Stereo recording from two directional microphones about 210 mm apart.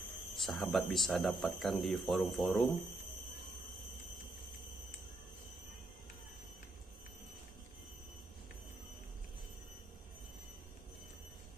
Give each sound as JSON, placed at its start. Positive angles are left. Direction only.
{"t": 0.4, "sound": "speech", "side_deg": 0}